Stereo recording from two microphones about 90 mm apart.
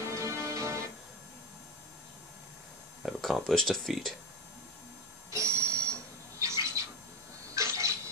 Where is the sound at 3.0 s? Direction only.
Centre (ahead or behind).